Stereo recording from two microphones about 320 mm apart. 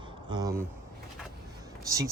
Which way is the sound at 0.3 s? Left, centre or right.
Centre.